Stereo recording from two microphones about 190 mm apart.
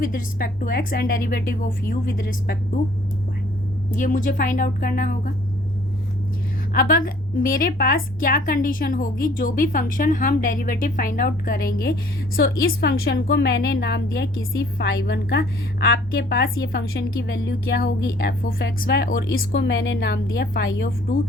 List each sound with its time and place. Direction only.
0.0 s a woman's voice: 45° left (ahead or behind)
3.9 s a woman's voice: 45° left (ahead or behind)
6.7 s a woman's voice: 50° left (ahead or behind)
12.4 s a woman's voice: 65° left (ahead or behind)